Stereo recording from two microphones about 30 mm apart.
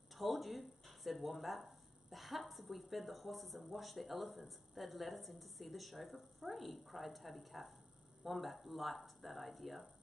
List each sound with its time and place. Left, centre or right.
0.1 s speech: centre